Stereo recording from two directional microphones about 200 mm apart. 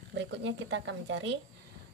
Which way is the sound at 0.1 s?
60° right (ahead or behind).